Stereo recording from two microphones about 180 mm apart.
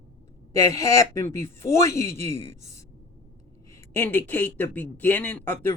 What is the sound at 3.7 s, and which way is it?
A woman's voice, 10° left (ahead or behind).